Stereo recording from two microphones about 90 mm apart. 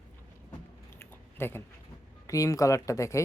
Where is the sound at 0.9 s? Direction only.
25° left (ahead or behind).